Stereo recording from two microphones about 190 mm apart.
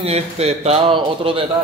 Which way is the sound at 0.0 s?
35° right (ahead or behind).